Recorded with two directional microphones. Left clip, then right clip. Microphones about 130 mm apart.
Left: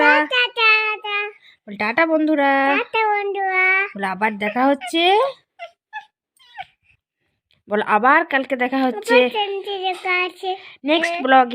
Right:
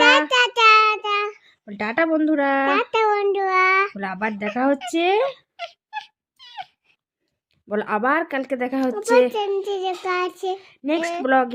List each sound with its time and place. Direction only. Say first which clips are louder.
0.3 s child singing: right 1 dB; 60° right (ahead or behind)
1.5 s speech: left 4 dB; 20° left (ahead or behind)
2.9 s child singing: even; 50° right (ahead or behind)
3.9 s speech: left 5 dB; 25° left (ahead or behind)
5.5 s dog: right 2 dB; 40° right (ahead or behind)
7.7 s speech: left 6 dB; 20° left (ahead or behind)
9.3 s a child's voice: even; 50° right (ahead or behind)
10.1 s child singing: left 3 dB; 55° right (ahead or behind)
10.6 s a child's voice: left 8 dB; 20° left (ahead or behind)